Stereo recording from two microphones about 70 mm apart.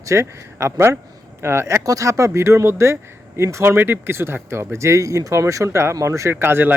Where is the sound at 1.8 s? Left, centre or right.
Right.